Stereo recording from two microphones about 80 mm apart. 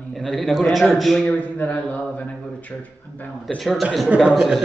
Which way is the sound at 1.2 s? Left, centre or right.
Centre.